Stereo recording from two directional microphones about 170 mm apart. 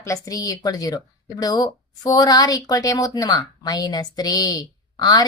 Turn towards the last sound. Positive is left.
turn(degrees=20)  # may be behind; listen again after turning